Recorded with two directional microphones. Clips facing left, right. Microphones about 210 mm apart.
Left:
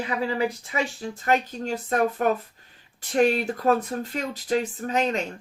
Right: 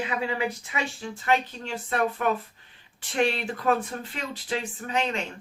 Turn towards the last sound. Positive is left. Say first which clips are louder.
# left 4 dB
turn(degrees=40)  # may be behind; listen again after turning